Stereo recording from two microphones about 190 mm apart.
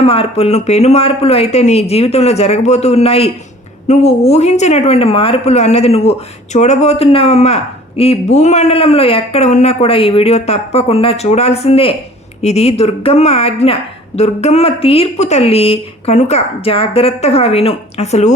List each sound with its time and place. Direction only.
0.0 s speech: 30° left (ahead or behind)